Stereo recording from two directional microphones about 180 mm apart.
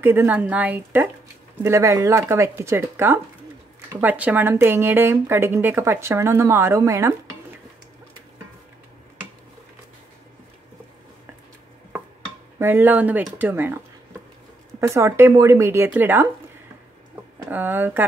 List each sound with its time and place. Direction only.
0.0 s speech: 15° right (ahead or behind)
12.5 s speech: 10° right (ahead or behind)
14.8 s speech: 15° right (ahead or behind)
17.5 s speech: 10° right (ahead or behind)